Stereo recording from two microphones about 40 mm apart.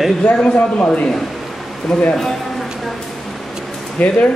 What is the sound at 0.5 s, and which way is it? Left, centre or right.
Speech, left.